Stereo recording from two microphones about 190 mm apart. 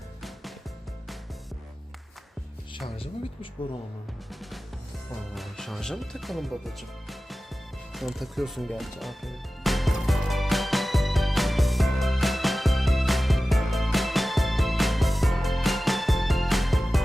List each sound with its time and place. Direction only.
0.2 s music: centre (ahead or behind)
4.3 s music: centre (ahead or behind)
5.3 s speech: centre (ahead or behind)
7.9 s music: centre (ahead or behind)